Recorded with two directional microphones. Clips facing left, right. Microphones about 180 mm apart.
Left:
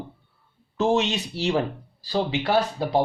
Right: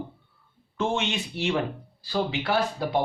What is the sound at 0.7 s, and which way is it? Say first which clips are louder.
Speech: left 5 dB; 40° left (ahead or behind).